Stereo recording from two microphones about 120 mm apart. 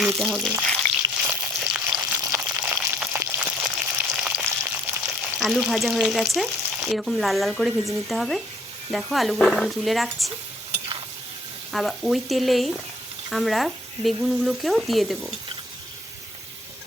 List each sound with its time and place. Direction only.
0.2 s frying: centre (ahead or behind)
1.2 s frying: 10° right (ahead or behind)
2.1 s a sound: 25° right (ahead or behind)
2.4 s a sound: 10° right (ahead or behind)
3.6 s frying: 10° right (ahead or behind)
5.0 s frying: centre (ahead or behind)
6.6 s frying: 10° right (ahead or behind)
6.9 s frying: centre (ahead or behind)
11.7 s frying: centre (ahead or behind)